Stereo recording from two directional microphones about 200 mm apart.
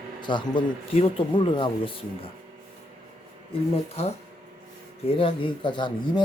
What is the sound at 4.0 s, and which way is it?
Speech, 30° left (ahead or behind).